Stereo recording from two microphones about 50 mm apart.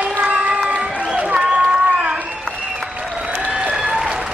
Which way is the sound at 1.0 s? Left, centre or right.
Centre.